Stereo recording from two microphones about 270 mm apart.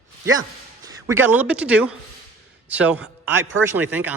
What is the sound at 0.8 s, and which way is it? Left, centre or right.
A man's voice, centre.